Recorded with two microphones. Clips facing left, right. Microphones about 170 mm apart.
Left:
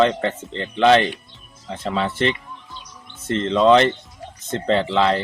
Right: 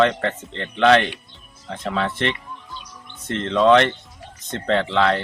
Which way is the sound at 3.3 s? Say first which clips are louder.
Left 4 dB; 35° left (ahead or behind).